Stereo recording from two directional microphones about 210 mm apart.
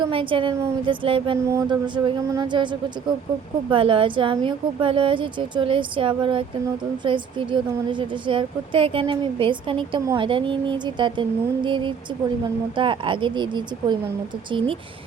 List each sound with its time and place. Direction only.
0.0 s a woman's voice: 25° right (ahead or behind)
3.7 s a woman's voice: 25° right (ahead or behind)